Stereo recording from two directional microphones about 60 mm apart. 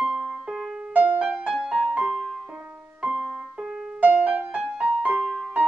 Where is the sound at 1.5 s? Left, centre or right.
Centre.